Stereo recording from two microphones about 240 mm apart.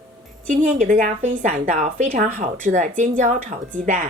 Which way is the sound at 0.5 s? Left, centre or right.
Right.